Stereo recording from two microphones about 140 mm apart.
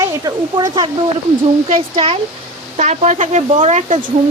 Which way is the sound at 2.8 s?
55° right (ahead or behind).